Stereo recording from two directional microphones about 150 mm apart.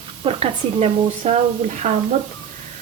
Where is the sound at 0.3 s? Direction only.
40° right (ahead or behind).